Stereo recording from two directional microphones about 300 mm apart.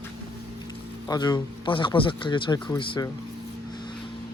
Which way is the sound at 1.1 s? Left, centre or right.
Centre.